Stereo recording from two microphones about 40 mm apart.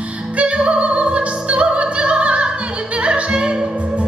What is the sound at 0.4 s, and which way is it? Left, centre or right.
Opera, right.